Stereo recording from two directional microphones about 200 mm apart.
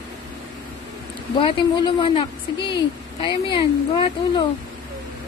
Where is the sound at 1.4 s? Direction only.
25° left (ahead or behind).